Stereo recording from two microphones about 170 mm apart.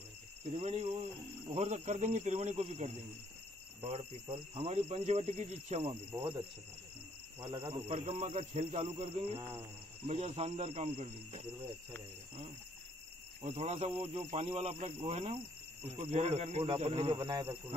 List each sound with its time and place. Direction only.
0.5 s speech: 35° right (ahead or behind)
7.3 s speech: 30° right (ahead or behind)
7.9 s speech: 40° right (ahead or behind)
9.4 s a sound: 15° right (ahead or behind)
10.0 s speech: 35° right (ahead or behind)
13.4 s speech: 40° right (ahead or behind)